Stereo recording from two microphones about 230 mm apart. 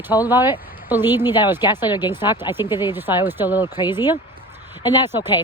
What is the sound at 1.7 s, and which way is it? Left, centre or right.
Speech, centre.